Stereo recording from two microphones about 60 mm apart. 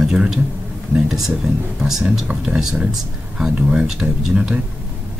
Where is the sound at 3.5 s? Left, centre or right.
Right.